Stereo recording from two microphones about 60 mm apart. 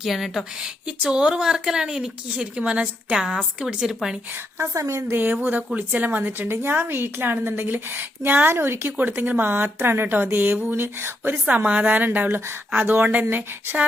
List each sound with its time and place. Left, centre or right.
0.0 s speech: centre
0.6 s a woman's voice: centre
4.5 s a woman's voice: right
5.1 s a woman's voice: right
6.5 s a woman's voice: right
9.0 s a woman's voice: right